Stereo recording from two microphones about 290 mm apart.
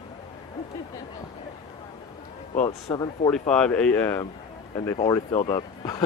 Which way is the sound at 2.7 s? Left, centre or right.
Centre.